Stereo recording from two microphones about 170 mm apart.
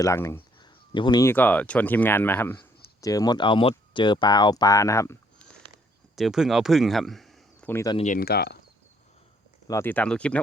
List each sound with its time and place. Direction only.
0.0 s speech: 15° left (ahead or behind)
0.6 s a sound: 25° left (ahead or behind)
1.2 s speech: 10° left (ahead or behind)
6.1 s speech: centre (ahead or behind)
7.7 s speech: 15° left (ahead or behind)
7.9 s speech: 45° left (ahead or behind)
8.2 s speech: 65° left (ahead or behind)
9.6 s speech: 15° left (ahead or behind)